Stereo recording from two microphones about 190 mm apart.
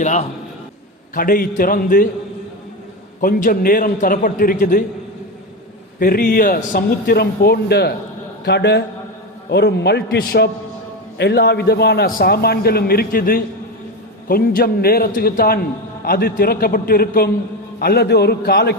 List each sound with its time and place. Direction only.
0.0 s a man's voice: 40° left (ahead or behind)
1.1 s a man's voice: 50° left (ahead or behind)
3.2 s a man's voice: 45° left (ahead or behind)
6.0 s a man's voice: 50° left (ahead or behind)